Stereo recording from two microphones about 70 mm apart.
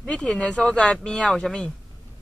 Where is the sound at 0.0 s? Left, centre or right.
Centre.